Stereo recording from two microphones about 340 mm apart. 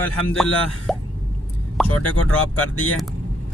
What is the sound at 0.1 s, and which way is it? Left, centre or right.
Speech, centre.